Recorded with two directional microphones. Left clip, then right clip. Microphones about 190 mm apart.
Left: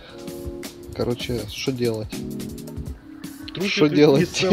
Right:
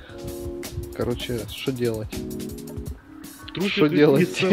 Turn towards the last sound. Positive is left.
turn(degrees=5)  # may be behind; listen again after turning